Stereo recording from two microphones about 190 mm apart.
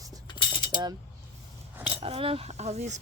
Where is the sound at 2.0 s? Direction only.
30° right (ahead or behind).